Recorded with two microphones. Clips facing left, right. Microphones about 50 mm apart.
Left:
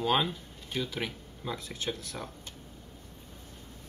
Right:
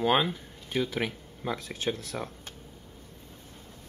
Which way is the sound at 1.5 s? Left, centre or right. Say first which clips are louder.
Right 4 dB; right.